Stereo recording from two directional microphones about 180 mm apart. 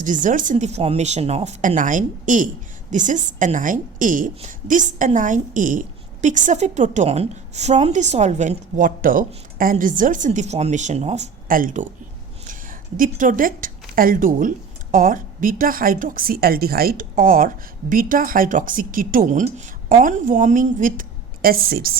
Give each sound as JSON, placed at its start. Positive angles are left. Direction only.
{"t": 0.0, "sound": "a woman's voice", "side_deg": -45}
{"t": 13.0, "sound": "a woman's voice", "side_deg": -45}